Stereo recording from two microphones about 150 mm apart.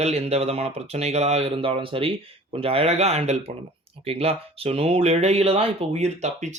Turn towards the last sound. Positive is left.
turn(degrees=-50)  # may be behind; listen again after turning